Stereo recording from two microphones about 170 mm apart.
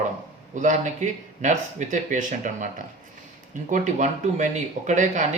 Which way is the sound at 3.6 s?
45° right (ahead or behind).